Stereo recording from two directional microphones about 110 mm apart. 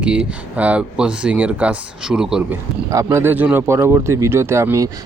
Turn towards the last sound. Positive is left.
turn(degrees=-25)  # may be behind; listen again after turning